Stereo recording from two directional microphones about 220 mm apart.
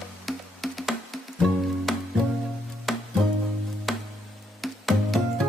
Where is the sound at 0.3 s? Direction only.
Centre (ahead or behind).